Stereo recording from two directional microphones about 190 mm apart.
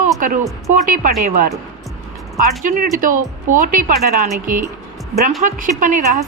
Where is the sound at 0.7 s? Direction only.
40° right (ahead or behind).